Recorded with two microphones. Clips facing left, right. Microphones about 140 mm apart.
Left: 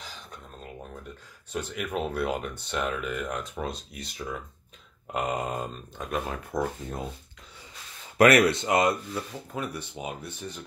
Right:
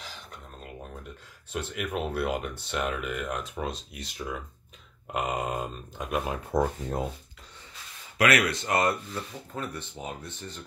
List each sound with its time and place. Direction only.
1.5 s speech: 5° right (ahead or behind)
6.5 s speech: 30° right (ahead or behind)
8.2 s speech: 45° left (ahead or behind)
8.5 s speech: 20° left (ahead or behind)